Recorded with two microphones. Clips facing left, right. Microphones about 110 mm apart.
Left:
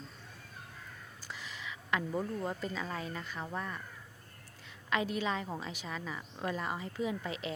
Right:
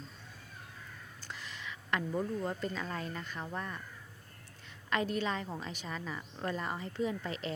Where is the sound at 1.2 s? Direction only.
Centre (ahead or behind).